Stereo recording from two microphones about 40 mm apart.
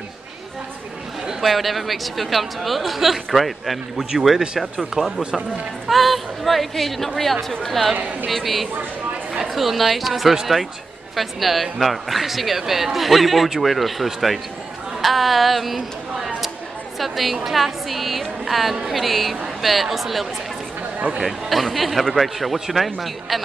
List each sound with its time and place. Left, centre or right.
1.4 s a woman's voice: centre
5.0 s a man's voice: right
5.9 s a woman's voice: centre
17.0 s a woman's voice: centre